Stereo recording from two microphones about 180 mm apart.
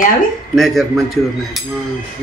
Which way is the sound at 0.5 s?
Centre (ahead or behind).